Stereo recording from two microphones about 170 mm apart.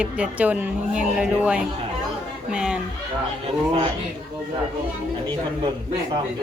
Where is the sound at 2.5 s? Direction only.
5° right (ahead or behind).